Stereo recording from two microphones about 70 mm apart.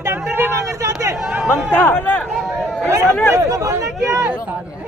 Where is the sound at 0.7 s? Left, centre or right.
Right.